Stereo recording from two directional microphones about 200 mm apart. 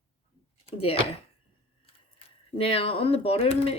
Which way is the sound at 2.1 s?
30° left (ahead or behind).